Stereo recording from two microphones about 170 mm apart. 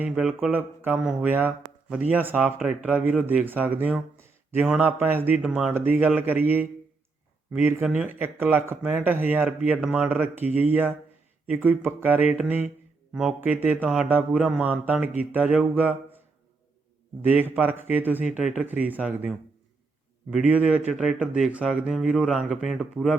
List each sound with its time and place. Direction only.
0.0 s speech: 5° right (ahead or behind)
17.2 s speech: 10° right (ahead or behind)